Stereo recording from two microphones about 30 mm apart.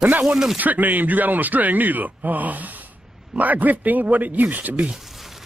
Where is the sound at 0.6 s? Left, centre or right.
Right.